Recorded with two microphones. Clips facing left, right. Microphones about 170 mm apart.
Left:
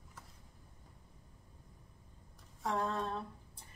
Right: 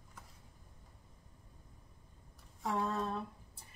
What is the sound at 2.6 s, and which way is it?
Speech, 5° right (ahead or behind).